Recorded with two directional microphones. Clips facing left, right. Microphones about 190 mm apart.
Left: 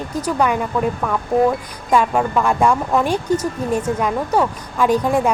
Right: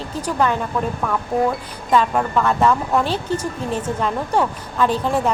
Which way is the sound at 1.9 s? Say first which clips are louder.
Left 1 dB; 10° left (ahead or behind).